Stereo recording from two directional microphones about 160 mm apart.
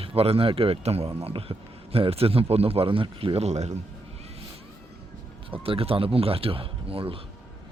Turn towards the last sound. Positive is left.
turn(degrees=-35)  # may be behind; listen again after turning